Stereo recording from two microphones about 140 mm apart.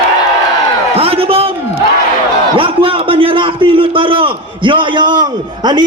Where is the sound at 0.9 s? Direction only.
45° right (ahead or behind).